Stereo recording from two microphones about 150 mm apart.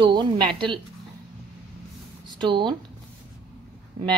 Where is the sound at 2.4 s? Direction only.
30° right (ahead or behind).